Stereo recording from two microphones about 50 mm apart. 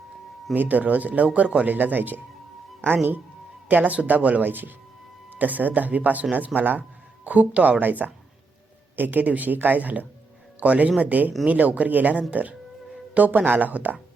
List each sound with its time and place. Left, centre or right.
0.5 s speech: right